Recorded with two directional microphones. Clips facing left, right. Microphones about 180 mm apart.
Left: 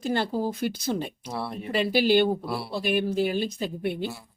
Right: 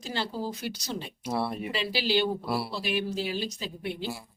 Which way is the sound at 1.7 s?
50° left (ahead or behind).